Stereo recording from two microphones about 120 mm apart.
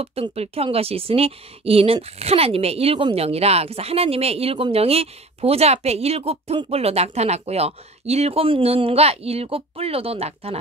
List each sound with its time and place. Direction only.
0.0 s speech: 55° right (ahead or behind)